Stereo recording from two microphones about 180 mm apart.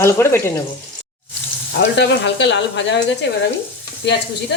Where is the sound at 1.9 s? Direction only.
75° left (ahead or behind).